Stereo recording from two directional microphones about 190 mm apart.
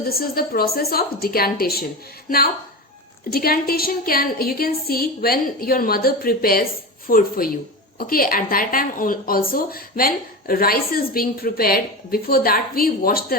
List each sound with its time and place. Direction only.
0.0 s a woman's voice: 50° left (ahead or behind)
3.3 s a woman's voice: 50° left (ahead or behind)